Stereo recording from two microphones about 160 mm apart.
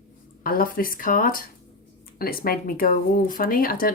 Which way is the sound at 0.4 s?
65° left (ahead or behind).